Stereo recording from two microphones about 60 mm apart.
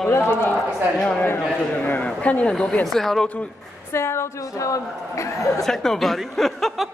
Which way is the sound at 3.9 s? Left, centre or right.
Left.